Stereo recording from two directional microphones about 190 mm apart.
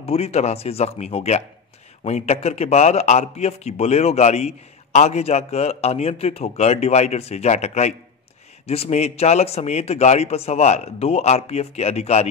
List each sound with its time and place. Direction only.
0.0 s a man's voice: 30° left (ahead or behind)